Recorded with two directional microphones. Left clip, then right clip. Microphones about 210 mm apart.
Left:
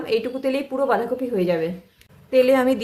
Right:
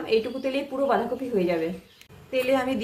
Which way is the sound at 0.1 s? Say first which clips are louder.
Left 2 dB; 40° left (ahead or behind).